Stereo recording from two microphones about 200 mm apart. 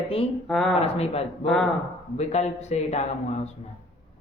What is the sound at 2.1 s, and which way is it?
A man's voice, 35° left (ahead or behind).